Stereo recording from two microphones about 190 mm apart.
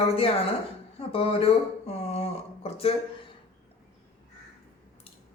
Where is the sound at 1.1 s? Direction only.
30° left (ahead or behind).